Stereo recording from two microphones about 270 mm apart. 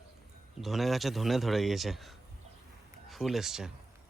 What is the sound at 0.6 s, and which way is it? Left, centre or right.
A man's voice, centre.